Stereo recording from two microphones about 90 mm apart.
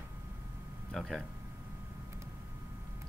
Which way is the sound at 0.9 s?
5° left (ahead or behind).